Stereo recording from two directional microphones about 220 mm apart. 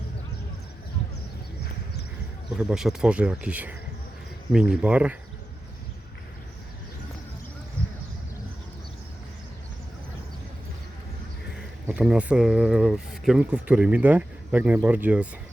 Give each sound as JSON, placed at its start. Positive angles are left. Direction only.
{"t": 2.6, "sound": "speech", "side_deg": 0}
{"t": 11.9, "sound": "speech", "side_deg": -5}